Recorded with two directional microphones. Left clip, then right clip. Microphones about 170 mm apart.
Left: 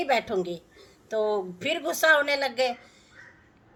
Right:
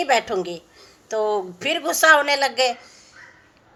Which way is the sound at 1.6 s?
20° left (ahead or behind).